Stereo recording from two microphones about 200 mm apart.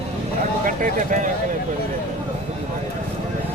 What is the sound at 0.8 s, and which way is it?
Speech, 40° right (ahead or behind).